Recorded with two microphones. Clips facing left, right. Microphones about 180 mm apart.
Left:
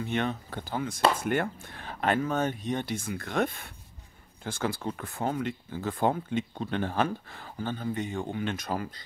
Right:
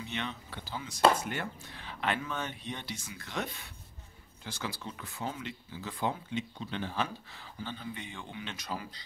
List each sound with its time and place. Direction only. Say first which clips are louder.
0.0 s speech: left 9 dB; 50° left (ahead or behind)